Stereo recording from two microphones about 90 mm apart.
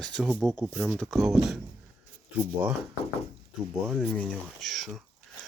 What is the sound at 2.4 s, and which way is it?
Speech, 15° right (ahead or behind).